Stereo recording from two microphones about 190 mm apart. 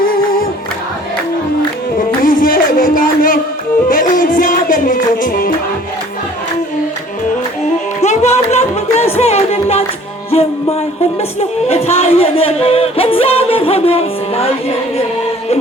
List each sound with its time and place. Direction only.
0.0 s music: 50° left (ahead or behind)
2.0 s music: 45° left (ahead or behind)
8.0 s music: 35° left (ahead or behind)
11.2 s a sound: 35° left (ahead or behind)